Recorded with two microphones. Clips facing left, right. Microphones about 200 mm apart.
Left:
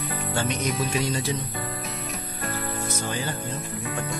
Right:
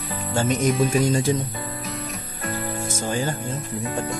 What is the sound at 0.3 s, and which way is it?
Speech, 45° right (ahead or behind).